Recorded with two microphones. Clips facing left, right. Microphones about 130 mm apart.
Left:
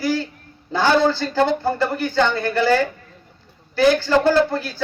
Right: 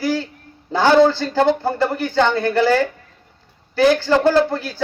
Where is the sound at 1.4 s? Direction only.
20° right (ahead or behind).